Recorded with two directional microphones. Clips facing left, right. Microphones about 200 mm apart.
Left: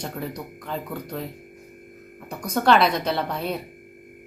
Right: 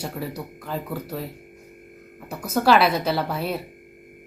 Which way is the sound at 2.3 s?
5° right (ahead or behind).